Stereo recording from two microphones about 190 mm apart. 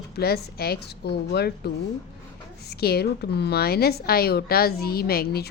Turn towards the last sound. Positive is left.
turn(degrees=55)  # may be behind; listen again after turning